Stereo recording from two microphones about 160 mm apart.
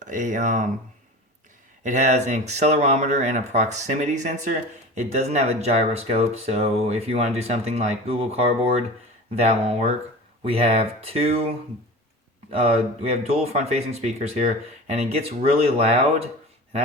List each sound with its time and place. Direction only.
0.0 s speech: 50° right (ahead or behind)
1.8 s speech: 50° right (ahead or behind)
12.5 s speech: 35° right (ahead or behind)